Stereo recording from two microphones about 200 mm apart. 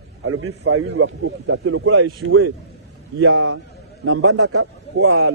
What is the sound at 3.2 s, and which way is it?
A man's voice, 90° right.